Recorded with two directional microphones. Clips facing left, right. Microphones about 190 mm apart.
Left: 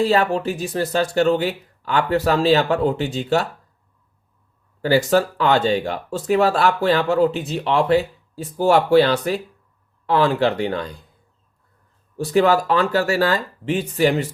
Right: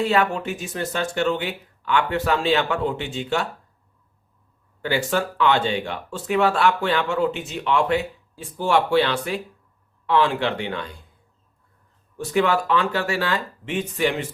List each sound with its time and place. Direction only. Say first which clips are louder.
0.0 s speech: left 3 dB; 35° left (ahead or behind)
4.8 s speech: left 6 dB; 40° left (ahead or behind)
12.1 s speech: left 4 dB; 35° left (ahead or behind)